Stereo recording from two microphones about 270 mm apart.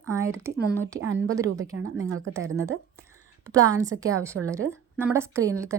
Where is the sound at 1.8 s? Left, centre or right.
Right.